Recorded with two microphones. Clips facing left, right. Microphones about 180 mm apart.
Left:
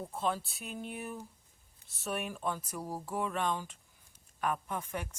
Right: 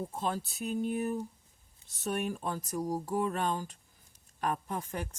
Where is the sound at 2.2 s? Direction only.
40° right (ahead or behind).